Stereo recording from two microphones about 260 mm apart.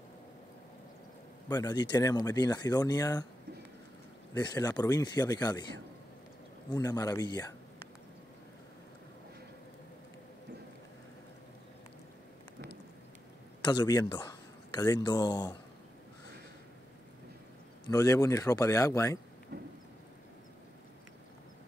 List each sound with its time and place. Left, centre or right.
1.5 s speech: centre
4.3 s speech: centre
6.7 s speech: centre
13.7 s speech: centre
17.8 s speech: centre
19.5 s a sound: right